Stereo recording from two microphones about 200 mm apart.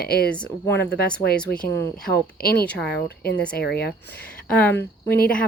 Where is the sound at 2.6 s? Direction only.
5° left (ahead or behind).